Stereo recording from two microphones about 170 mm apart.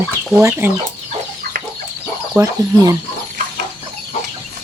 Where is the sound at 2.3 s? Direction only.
20° right (ahead or behind).